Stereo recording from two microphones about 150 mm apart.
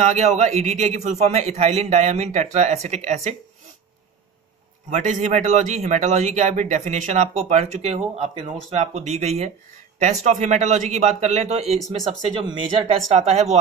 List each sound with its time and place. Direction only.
0.0 s a man's voice: 50° right (ahead or behind)
4.8 s a man's voice: 55° right (ahead or behind)
11.9 s speech: 35° right (ahead or behind)
13.1 s a man's voice: 45° right (ahead or behind)